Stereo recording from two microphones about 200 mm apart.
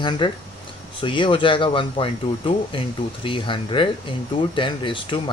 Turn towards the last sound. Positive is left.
turn(degrees=25)  # may be behind; listen again after turning